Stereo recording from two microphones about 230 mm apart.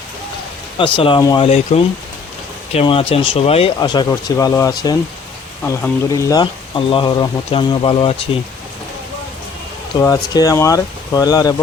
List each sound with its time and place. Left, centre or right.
0.9 s speech: left
10.0 s speech: centre